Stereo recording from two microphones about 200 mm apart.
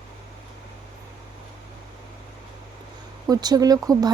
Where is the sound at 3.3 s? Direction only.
20° right (ahead or behind).